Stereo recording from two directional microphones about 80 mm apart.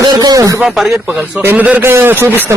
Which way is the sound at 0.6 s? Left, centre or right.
Centre.